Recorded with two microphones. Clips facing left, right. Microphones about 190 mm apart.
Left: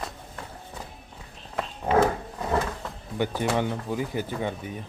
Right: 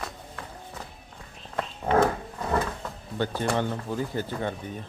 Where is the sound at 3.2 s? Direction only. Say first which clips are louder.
Left 1 dB; 15° left (ahead or behind).